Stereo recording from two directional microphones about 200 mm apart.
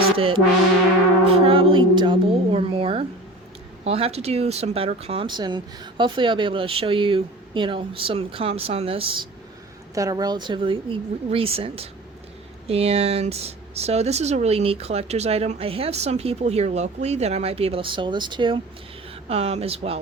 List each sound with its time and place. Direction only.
0.2 s speech: 25° right (ahead or behind)
9.9 s speech: 15° right (ahead or behind)